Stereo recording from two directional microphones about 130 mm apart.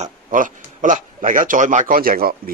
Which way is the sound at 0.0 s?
80° right.